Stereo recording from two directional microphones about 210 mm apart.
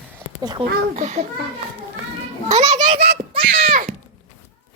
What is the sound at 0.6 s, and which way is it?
Speech, 25° right (ahead or behind).